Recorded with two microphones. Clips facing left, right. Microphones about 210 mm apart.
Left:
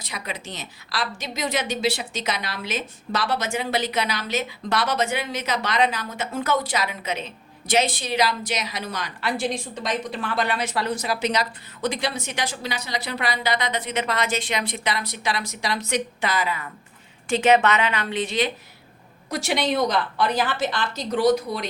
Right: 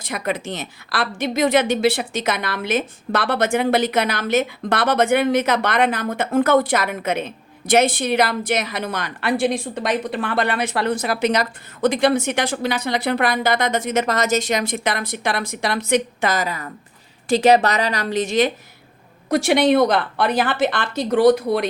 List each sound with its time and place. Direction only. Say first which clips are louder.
0.0 s a woman's voice: right 9 dB; 50° right (ahead or behind)
19.3 s a woman's voice: right 8 dB; 55° right (ahead or behind)